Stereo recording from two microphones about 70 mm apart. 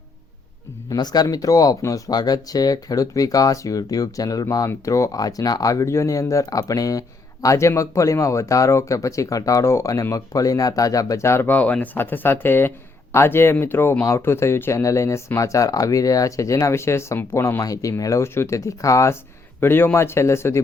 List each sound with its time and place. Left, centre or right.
0.9 s speech: left
2.0 s speech: left
11.3 s speech: left
11.5 s speech: left
17.6 s speech: left
19.5 s speech: left